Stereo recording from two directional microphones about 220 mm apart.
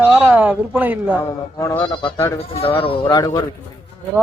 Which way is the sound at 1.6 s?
10° left (ahead or behind).